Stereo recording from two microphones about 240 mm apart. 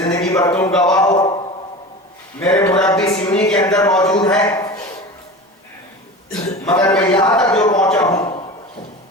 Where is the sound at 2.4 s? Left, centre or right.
Centre.